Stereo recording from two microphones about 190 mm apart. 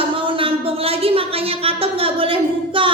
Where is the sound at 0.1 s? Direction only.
25° right (ahead or behind).